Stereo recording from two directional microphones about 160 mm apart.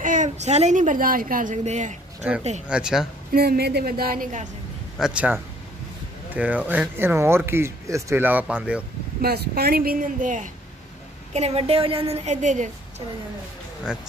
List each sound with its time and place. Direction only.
0.0 s a woman's voice: 50° right (ahead or behind)
2.2 s a woman's voice: 5° right (ahead or behind)
3.3 s a woman's voice: 75° right (ahead or behind); by 4.5 s 55° right (ahead or behind)
4.9 s speech: 5° right (ahead or behind)
9.2 s a woman's voice: 80° right; by 10.5 s 55° right (ahead or behind)
11.3 s a woman's voice: 40° right (ahead or behind)